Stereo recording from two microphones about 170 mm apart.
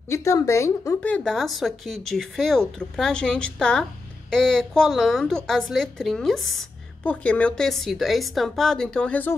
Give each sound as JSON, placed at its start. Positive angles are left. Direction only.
{"t": 0.1, "sound": "speech", "side_deg": 15}